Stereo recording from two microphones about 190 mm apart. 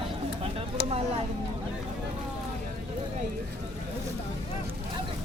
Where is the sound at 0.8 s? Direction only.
60° left (ahead or behind).